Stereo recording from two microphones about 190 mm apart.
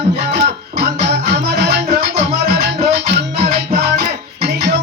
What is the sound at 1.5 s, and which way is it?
Music, 60° right (ahead or behind).